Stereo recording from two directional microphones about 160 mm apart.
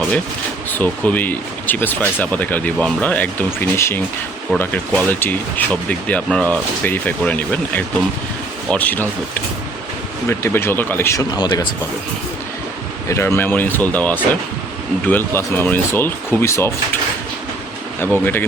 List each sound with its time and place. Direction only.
0.7 s speech: 10° left (ahead or behind)
10.2 s speech: 15° left (ahead or behind)
13.1 s speech: 15° left (ahead or behind)
18.0 s speech: 15° left (ahead or behind)